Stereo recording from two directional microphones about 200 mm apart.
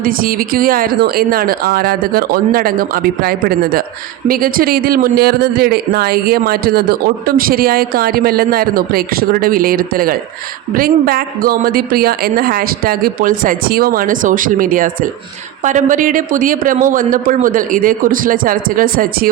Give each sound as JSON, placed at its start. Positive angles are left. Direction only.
{"t": 0.0, "sound": "a man's voice", "side_deg": -45}